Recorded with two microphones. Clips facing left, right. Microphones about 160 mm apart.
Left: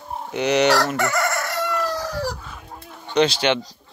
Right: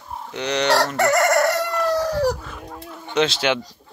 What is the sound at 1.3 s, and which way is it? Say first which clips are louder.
Chicken: right 7 dB; 65° right (ahead or behind).